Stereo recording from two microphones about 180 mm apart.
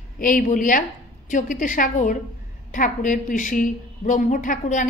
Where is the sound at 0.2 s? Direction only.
50° left (ahead or behind).